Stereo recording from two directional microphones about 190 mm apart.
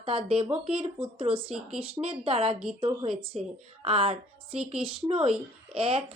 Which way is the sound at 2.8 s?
30° right (ahead or behind).